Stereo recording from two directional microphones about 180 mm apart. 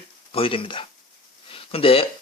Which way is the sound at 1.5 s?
30° left (ahead or behind).